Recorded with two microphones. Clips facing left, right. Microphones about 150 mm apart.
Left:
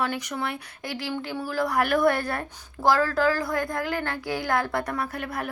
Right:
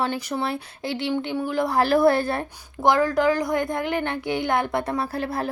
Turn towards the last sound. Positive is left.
turn(degrees=-30)  # may be behind; listen again after turning